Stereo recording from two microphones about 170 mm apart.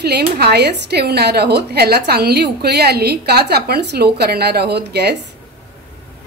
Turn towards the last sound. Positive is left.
turn(degrees=-75)  # may be behind; listen again after turning